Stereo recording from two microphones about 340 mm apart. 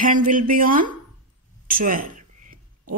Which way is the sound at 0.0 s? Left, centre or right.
Right.